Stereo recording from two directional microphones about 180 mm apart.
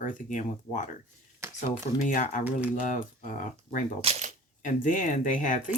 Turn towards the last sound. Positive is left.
turn(degrees=45)  # may be behind; listen again after turning